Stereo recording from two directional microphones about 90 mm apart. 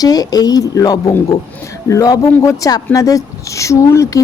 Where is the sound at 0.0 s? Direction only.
45° left (ahead or behind).